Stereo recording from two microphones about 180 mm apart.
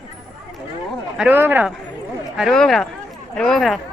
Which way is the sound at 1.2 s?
10° right (ahead or behind).